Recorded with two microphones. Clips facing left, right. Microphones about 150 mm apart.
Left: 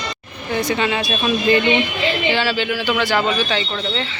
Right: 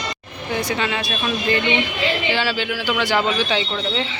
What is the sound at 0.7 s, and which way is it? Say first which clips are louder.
Speech: left 3 dB; centre (ahead or behind).